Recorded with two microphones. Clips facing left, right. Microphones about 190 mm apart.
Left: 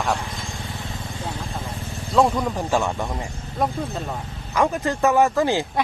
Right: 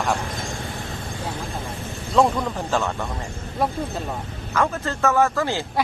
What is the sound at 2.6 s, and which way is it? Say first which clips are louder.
Speech: left 2 dB; 10° left (ahead or behind).